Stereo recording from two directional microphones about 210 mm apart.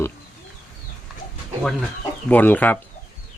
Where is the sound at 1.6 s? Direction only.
Centre (ahead or behind).